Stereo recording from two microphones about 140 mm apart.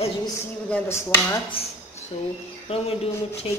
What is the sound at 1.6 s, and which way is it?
Speech, 45° left (ahead or behind).